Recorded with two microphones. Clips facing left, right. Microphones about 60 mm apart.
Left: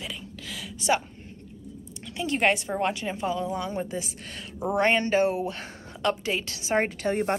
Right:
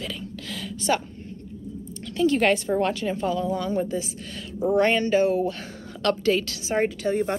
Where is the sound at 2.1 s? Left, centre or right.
Left.